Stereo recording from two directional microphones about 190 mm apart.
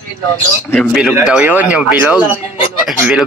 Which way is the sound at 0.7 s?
Centre (ahead or behind).